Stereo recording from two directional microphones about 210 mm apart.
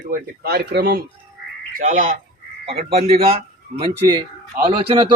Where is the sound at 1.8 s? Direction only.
35° right (ahead or behind).